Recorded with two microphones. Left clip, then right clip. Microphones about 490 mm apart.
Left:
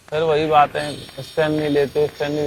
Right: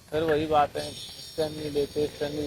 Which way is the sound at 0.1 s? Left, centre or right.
Left.